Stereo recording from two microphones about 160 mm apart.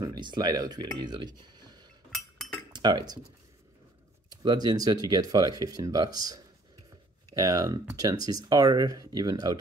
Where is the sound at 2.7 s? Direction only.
25° right (ahead or behind).